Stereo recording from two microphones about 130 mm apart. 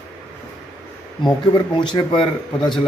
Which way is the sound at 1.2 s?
40° left (ahead or behind).